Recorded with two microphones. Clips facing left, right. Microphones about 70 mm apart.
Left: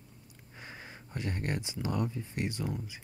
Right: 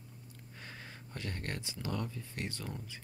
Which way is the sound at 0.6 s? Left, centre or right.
Centre.